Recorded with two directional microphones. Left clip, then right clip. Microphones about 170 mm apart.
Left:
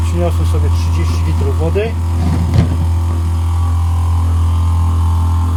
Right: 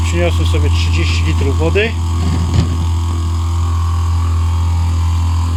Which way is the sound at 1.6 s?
10° right (ahead or behind).